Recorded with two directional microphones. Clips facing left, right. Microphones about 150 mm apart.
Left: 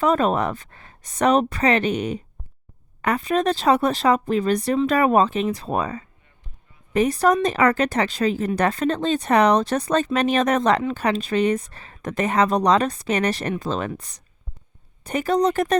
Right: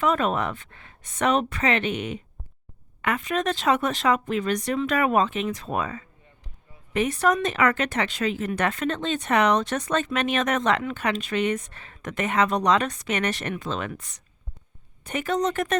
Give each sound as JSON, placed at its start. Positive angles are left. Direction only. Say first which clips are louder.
{"t": 0.0, "sound": "speech", "louder": "left 4 dB", "side_deg": 35}